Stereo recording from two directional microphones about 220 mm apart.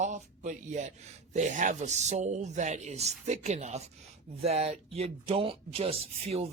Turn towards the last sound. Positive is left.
turn(degrees=-25)  # may be behind; listen again after turning